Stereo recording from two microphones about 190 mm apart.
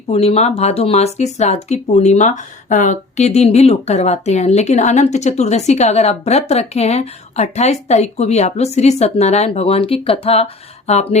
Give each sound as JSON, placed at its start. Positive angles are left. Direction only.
{"t": 0.1, "sound": "speech", "side_deg": 35}